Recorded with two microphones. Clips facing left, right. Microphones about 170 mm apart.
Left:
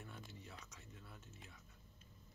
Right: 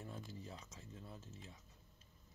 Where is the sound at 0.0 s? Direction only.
35° right (ahead or behind).